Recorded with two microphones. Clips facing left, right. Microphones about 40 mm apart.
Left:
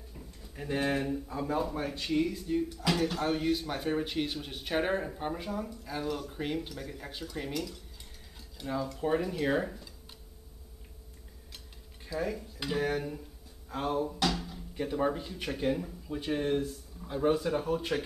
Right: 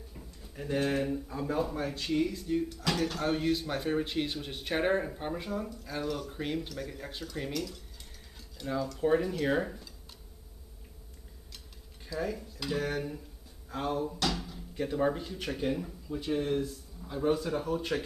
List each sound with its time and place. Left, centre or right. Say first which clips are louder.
0.6 s speech: right 1 dB; centre
1.0 s speech: even; centre
9.0 s speech: right 2 dB; centre
12.2 s speech: even; centre
16.1 s speech: even; centre